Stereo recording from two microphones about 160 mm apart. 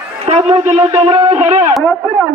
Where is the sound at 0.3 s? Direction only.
40° right (ahead or behind).